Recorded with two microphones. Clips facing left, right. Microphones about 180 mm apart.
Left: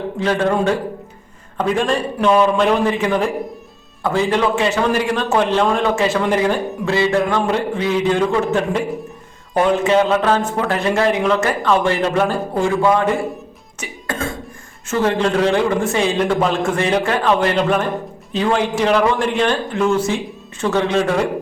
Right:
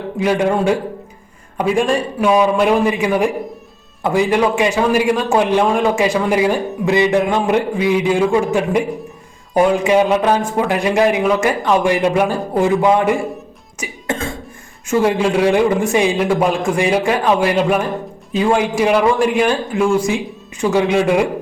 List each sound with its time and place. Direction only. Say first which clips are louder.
0.2 s a man's voice: right 2 dB; 10° right (ahead or behind)
1.5 s a man's voice: right 2 dB; 10° right (ahead or behind)
14.1 s beatboxing: right 3 dB; 20° right (ahead or behind)
14.8 s a man's voice: right 2 dB; 10° right (ahead or behind)